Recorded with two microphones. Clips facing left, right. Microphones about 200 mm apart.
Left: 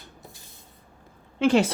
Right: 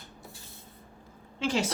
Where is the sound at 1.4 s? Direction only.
60° left (ahead or behind).